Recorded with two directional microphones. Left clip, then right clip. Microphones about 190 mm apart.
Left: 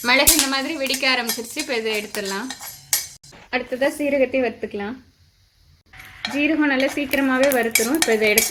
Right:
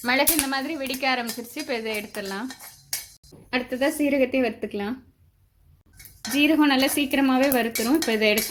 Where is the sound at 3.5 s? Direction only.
50° right (ahead or behind).